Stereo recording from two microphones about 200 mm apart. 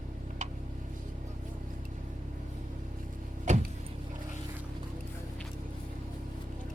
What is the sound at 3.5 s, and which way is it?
Vehicle, 35° right (ahead or behind).